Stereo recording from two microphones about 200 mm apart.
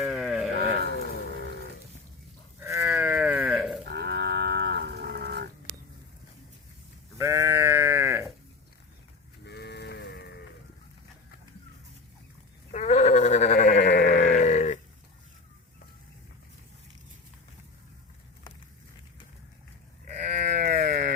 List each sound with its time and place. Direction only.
0.0 s sheep: 5° right (ahead or behind)
0.6 s a sound: 55° right (ahead or behind)
2.6 s livestock: 15° right (ahead or behind)
3.8 s livestock: 55° right (ahead or behind)
7.2 s sheep: 15° right (ahead or behind)
9.4 s livestock: 55° left (ahead or behind)
12.7 s sheep: 35° left (ahead or behind)
20.3 s sheep: 35° right (ahead or behind)